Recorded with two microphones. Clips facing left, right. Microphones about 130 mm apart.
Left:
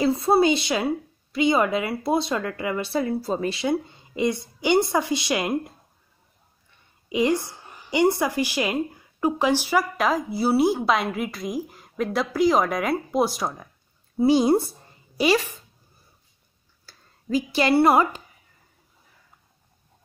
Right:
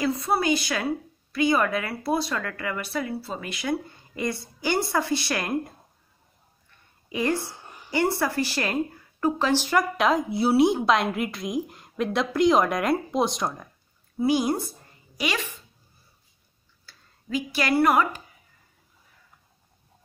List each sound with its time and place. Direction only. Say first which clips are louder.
0.0 s a woman's voice: left 6 dB; 30° left (ahead or behind)
3.1 s a woman's voice: left 7 dB; 40° left (ahead or behind); by 5.7 s 15° left (ahead or behind)
7.1 s a woman's voice: left 4 dB; 15° left (ahead or behind)
14.1 s a woman's voice: left 5 dB; 25° left (ahead or behind)
16.8 s speech: left 7 dB; 35° left (ahead or behind)